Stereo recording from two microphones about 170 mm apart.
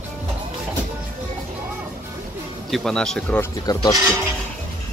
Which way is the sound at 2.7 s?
5° left (ahead or behind).